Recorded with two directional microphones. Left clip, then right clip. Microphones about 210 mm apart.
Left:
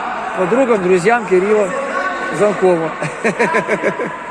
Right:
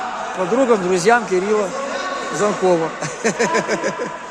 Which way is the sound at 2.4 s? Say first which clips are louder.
Left 3 dB; 15° right (ahead or behind).